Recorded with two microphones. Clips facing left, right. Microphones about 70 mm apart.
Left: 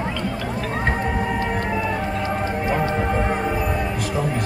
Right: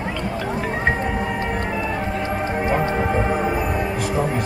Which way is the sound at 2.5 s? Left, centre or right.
Right.